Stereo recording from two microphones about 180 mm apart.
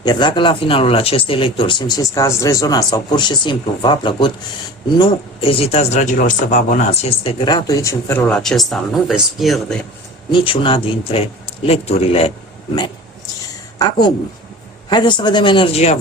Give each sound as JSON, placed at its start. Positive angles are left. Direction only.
{"t": 0.0, "sound": "speech", "side_deg": 25}
{"t": 10.3, "sound": "speech", "side_deg": 30}
{"t": 13.7, "sound": "a woman's voice", "side_deg": 20}